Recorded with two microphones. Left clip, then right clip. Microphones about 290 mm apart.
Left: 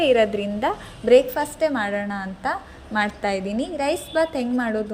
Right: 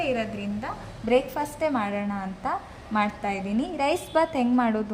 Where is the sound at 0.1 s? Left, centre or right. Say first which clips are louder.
Left 10 dB; centre.